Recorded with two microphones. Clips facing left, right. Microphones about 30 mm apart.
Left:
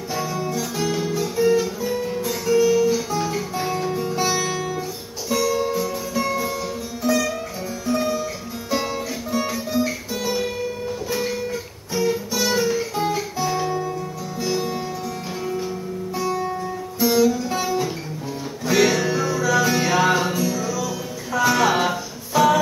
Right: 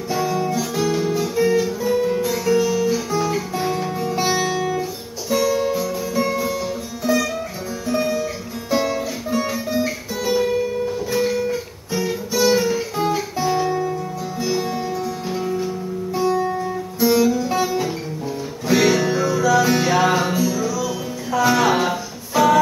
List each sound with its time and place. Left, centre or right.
0.1 s guitar: centre
2.4 s music: centre
4.3 s music: right
5.3 s guitar: centre
6.1 s music: centre
16.3 s guitar: centre
18.7 s music: centre